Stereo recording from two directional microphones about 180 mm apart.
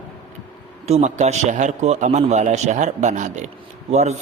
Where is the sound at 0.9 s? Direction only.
40° right (ahead or behind).